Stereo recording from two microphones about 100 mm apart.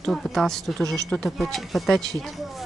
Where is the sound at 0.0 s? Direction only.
5° left (ahead or behind).